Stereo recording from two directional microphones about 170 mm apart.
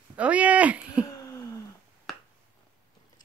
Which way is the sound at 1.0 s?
20° left (ahead or behind).